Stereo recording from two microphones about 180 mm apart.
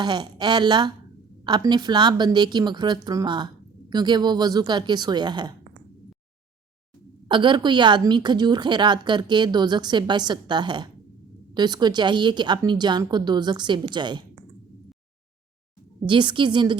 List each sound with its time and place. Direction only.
0.0 s a woman's voice: 25° right (ahead or behind)
7.3 s a woman's voice: 25° right (ahead or behind)
16.0 s a woman's voice: 25° right (ahead or behind)